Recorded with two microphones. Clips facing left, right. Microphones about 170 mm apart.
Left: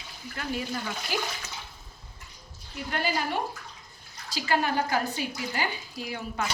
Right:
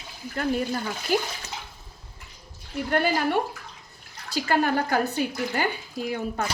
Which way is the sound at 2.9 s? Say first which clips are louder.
Right 6 dB; 55° right (ahead or behind).